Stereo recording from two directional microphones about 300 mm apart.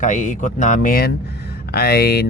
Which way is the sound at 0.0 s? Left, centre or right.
Left.